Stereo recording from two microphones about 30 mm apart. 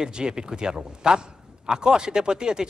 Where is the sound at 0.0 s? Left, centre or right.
Right.